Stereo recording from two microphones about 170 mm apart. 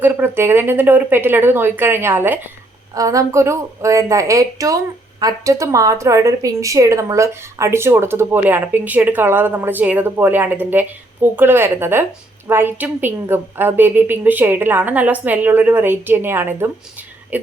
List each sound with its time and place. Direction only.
0.0 s a woman's voice: 15° right (ahead or behind)